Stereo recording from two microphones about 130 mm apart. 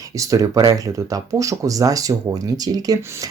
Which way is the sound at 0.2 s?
25° right (ahead or behind).